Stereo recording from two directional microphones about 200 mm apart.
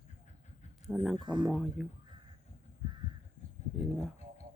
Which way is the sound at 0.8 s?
Centre (ahead or behind).